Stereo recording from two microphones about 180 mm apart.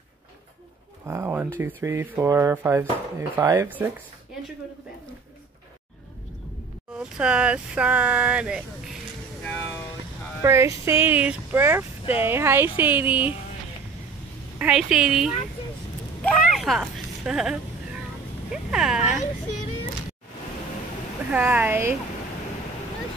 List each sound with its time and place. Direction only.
1.0 s speech: 15° right (ahead or behind)
7.0 s speech: 5° right (ahead or behind)
9.4 s vehicle: 10° left (ahead or behind)
10.4 s speech: 15° right (ahead or behind)
14.6 s speech: 5° right (ahead or behind)
16.2 s a sound: 5° left (ahead or behind)
18.5 s speech: centre (ahead or behind)
21.3 s speech: 10° right (ahead or behind)